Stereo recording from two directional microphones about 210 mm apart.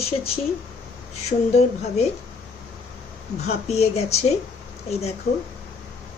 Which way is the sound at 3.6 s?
30° left (ahead or behind).